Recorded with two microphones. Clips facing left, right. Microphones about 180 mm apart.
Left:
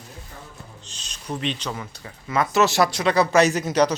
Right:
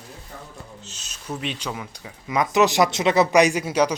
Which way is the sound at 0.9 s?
5° right (ahead or behind).